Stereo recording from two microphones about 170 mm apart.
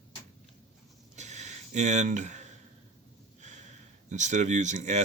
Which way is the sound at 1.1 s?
45° right (ahead or behind).